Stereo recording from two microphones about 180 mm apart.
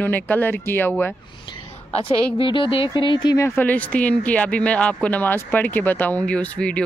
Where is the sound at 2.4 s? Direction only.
30° left (ahead or behind).